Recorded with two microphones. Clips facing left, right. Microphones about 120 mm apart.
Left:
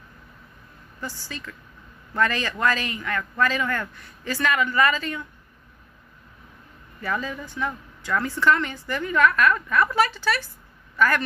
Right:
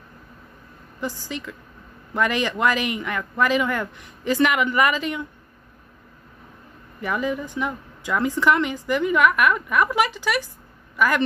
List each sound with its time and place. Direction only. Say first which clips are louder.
1.0 s a woman's voice: right 6 dB; 15° right (ahead or behind)
7.0 s a woman's voice: right 4 dB; 15° right (ahead or behind)